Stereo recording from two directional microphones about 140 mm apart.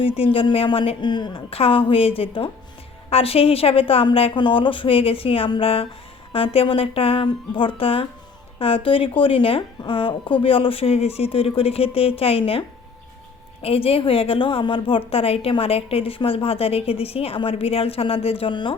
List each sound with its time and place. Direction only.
0.2 s a woman's voice: 40° left (ahead or behind)